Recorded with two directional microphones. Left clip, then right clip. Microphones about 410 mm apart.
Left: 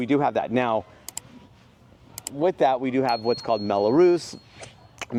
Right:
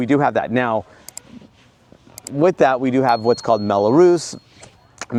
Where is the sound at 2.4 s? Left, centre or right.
Right.